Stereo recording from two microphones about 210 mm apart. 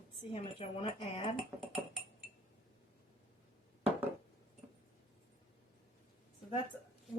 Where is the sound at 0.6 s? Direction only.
30° left (ahead or behind).